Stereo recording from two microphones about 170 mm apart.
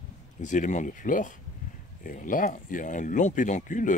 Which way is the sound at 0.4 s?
45° left (ahead or behind).